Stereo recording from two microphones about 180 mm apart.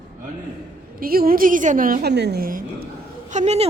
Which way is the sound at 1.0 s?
55° right (ahead or behind).